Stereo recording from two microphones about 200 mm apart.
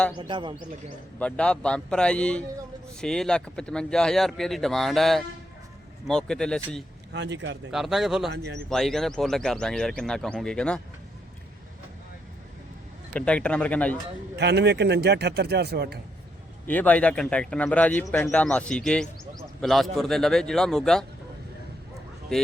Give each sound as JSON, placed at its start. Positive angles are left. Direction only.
{"t": 0.2, "sound": "speech", "side_deg": -25}
{"t": 1.2, "sound": "speech", "side_deg": 5}
{"t": 7.1, "sound": "speech", "side_deg": -60}
{"t": 7.7, "sound": "speech", "side_deg": 0}
{"t": 13.1, "sound": "a man's voice", "side_deg": 5}
{"t": 14.3, "sound": "speech", "side_deg": -60}
{"t": 16.6, "sound": "a man's voice", "side_deg": 10}